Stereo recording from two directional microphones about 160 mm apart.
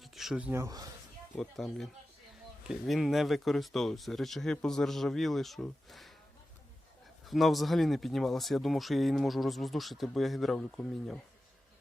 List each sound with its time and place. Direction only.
0.0 s a sound: centre (ahead or behind)
1.4 s speech: 5° left (ahead or behind)
7.3 s speech: centre (ahead or behind)